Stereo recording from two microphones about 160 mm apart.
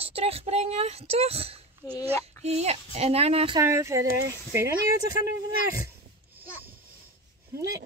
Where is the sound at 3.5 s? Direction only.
20° right (ahead or behind).